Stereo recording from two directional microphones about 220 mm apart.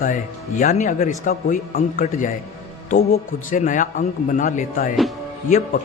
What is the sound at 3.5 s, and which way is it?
Speech, 35° left (ahead or behind).